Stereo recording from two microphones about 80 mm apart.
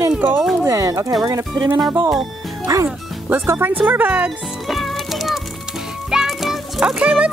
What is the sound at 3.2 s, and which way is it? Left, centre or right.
Speech, right.